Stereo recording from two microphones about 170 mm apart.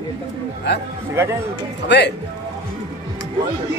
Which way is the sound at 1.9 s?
90° left.